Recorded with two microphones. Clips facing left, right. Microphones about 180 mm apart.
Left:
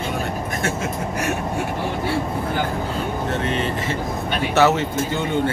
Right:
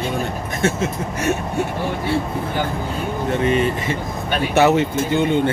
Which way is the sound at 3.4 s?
15° right (ahead or behind).